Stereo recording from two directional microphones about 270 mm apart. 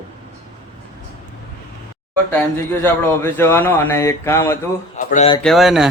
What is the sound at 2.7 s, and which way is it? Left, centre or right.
Speech, centre.